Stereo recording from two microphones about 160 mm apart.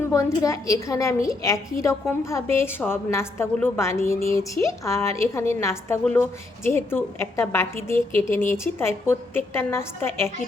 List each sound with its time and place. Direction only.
0.0 s a woman's voice: 20° left (ahead or behind)